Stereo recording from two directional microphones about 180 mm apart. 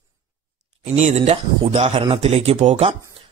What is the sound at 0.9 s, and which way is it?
Speech, 40° right (ahead or behind).